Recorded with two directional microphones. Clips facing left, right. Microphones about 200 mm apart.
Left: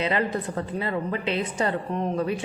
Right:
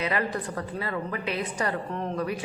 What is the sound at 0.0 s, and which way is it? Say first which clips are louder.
A woman's voice: left 3 dB; 25° left (ahead or behind).